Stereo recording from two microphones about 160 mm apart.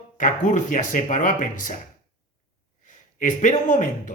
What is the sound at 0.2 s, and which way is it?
Speech, 50° left (ahead or behind).